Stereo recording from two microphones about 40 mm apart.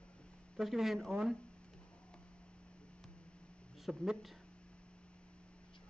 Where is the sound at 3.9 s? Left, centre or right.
Centre.